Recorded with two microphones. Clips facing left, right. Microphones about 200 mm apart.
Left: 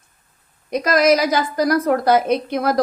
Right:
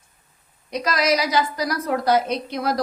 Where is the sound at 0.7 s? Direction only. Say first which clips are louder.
Left 6 dB; 50° left (ahead or behind).